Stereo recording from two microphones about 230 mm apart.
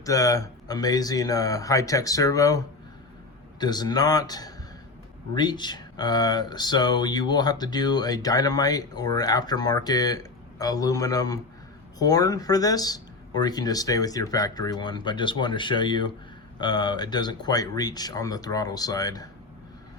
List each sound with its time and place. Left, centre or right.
0.0 s speech: centre
3.6 s speech: centre